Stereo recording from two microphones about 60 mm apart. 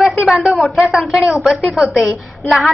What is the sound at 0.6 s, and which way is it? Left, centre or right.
A woman's voice, centre.